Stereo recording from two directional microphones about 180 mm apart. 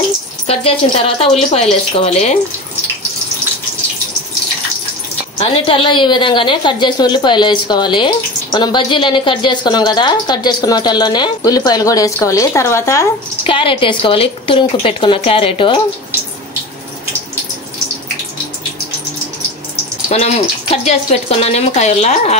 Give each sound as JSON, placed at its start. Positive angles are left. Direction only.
{"t": 0.5, "sound": "speech", "side_deg": 35}
{"t": 5.7, "sound": "a woman's voice", "side_deg": 25}
{"t": 13.5, "sound": "a woman's voice", "side_deg": 30}
{"t": 20.1, "sound": "speech", "side_deg": 40}